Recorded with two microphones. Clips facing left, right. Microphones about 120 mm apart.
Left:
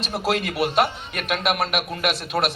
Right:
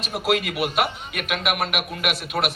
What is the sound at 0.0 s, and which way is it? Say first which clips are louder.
A man's voice: even; 35° left (ahead or behind).